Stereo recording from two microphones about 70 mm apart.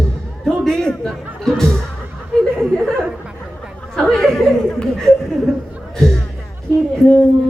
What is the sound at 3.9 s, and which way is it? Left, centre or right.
Chuckle, centre.